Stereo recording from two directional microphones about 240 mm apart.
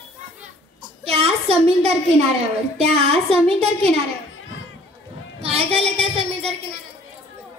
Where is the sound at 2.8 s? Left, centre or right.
Right.